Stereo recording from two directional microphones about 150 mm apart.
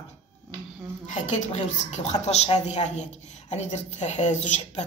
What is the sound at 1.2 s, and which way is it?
A woman's voice, 55° left (ahead or behind).